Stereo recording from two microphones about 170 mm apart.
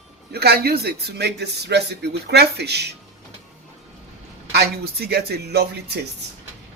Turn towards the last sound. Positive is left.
turn(degrees=-70)  # may be behind; listen again after turning